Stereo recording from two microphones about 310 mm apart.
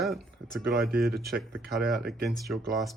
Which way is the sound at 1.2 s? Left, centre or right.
Centre.